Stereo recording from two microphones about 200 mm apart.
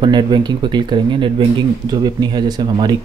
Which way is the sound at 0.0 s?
25° right (ahead or behind).